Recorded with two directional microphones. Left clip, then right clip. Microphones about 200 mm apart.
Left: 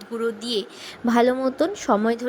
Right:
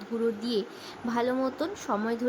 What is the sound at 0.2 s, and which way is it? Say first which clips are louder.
Speech: left 4 dB; 35° left (ahead or behind).